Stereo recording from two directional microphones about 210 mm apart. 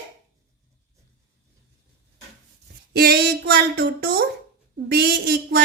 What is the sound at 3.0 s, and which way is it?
A woman's voice, 50° right (ahead or behind).